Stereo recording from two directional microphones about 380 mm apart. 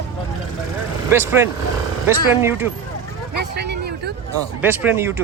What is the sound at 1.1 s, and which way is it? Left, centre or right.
Speech, centre.